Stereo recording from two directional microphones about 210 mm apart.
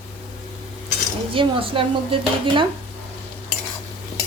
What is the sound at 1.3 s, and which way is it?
Speech, 25° right (ahead or behind).